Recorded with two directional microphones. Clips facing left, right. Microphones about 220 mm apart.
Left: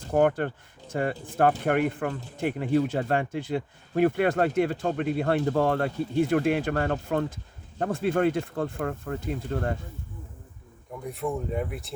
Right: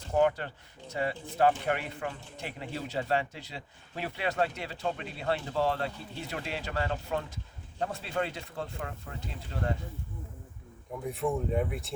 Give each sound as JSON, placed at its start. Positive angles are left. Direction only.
{"t": 0.1, "sound": "speech", "side_deg": 55}
{"t": 11.0, "sound": "speech", "side_deg": 0}